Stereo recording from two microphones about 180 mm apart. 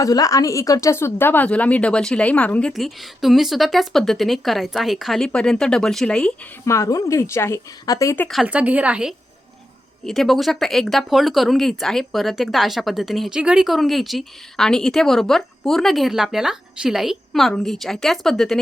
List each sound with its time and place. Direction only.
0.0 s speech: 20° left (ahead or behind)
6.7 s a woman's voice: 15° left (ahead or behind)
8.3 s a woman's voice: 5° right (ahead or behind)